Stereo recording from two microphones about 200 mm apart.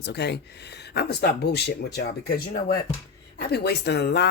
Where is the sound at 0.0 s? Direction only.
55° left (ahead or behind).